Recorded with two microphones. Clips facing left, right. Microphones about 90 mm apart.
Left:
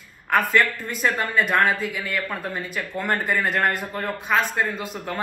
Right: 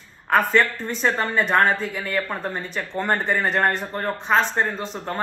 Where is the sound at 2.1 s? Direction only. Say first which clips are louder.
Right 2 dB; 30° right (ahead or behind).